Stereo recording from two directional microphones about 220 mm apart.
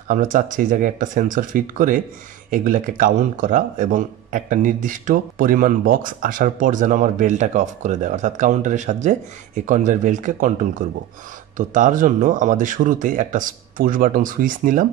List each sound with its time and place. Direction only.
0.1 s a man's voice: 35° right (ahead or behind)